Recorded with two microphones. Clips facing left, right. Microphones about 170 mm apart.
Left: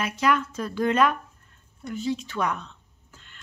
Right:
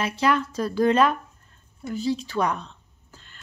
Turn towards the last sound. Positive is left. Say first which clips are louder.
# right 2 dB
turn(degrees=-35)  # may be behind; listen again after turning